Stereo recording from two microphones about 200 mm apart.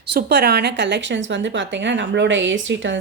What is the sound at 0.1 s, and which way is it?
Speech, 55° right (ahead or behind).